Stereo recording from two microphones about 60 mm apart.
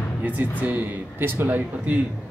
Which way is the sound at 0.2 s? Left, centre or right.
Right.